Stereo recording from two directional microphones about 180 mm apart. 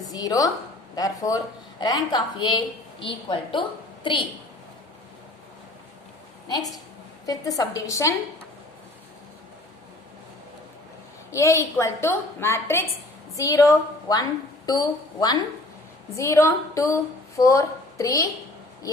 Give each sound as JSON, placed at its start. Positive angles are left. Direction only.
{"t": 0.0, "sound": "a woman's voice", "side_deg": 20}
{"t": 7.3, "sound": "a woman's voice", "side_deg": 20}
{"t": 11.3, "sound": "a woman's voice", "side_deg": 15}